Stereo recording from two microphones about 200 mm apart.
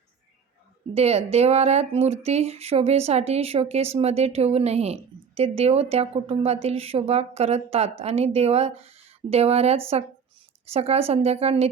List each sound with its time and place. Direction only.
0.9 s speech: 30° right (ahead or behind)